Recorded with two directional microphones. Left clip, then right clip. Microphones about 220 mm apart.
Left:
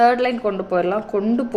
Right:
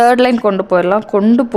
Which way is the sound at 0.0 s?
50° right (ahead or behind).